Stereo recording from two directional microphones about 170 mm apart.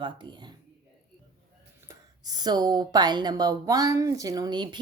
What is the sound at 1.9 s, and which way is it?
Speech, 20° right (ahead or behind).